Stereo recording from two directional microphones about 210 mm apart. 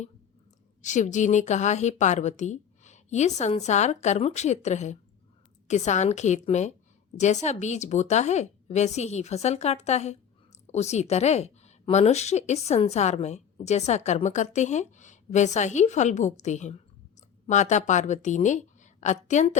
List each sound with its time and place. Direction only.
0.8 s a woman's voice: 35° left (ahead or behind)